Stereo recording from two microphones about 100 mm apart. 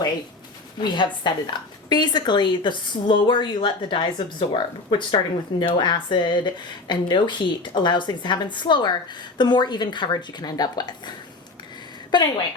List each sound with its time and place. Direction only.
0.8 s a woman's voice: 50° left (ahead or behind)
12.1 s a woman's voice: 45° left (ahead or behind)